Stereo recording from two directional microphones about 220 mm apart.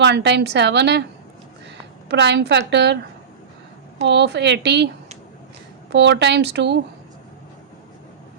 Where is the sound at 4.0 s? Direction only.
50° right (ahead or behind).